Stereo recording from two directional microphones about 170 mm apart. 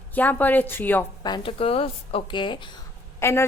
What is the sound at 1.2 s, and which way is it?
A woman's voice, 30° left (ahead or behind).